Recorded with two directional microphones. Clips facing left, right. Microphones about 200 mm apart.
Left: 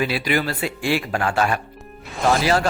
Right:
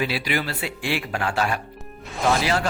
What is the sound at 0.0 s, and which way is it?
Speech, 50° left (ahead or behind).